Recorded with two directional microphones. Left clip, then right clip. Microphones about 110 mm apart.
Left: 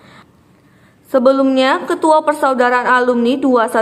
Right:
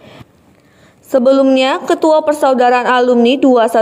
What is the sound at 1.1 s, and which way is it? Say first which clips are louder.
Speech: right 2 dB; 45° right (ahead or behind).